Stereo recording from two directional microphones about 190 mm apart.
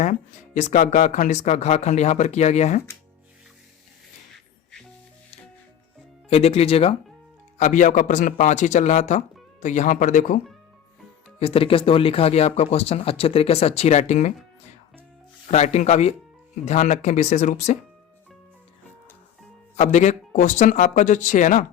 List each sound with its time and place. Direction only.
0.0 s speech: 40° left (ahead or behind)
6.3 s speech: 30° left (ahead or behind)
11.3 s speech: 30° left (ahead or behind)
15.4 s speech: 35° left (ahead or behind)
19.7 s speech: 35° left (ahead or behind)